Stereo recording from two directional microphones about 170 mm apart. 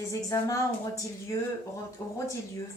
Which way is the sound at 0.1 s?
20° left (ahead or behind).